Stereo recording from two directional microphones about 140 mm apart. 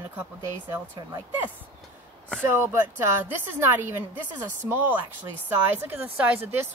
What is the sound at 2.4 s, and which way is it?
Speech, 15° right (ahead or behind).